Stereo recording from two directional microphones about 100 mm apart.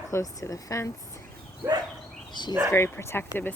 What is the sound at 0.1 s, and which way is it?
Speech, 30° left (ahead or behind).